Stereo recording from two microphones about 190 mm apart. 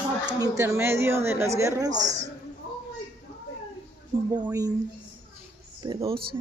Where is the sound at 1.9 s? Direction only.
40° right (ahead or behind).